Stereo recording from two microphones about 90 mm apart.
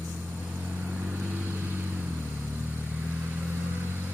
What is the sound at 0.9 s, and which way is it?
Vehicle, 25° right (ahead or behind).